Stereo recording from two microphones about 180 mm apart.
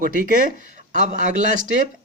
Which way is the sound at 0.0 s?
50° right (ahead or behind).